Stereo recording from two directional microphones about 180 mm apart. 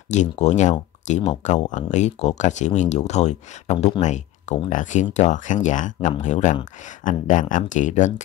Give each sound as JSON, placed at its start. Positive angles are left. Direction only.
{"t": 0.1, "sound": "speech", "side_deg": 40}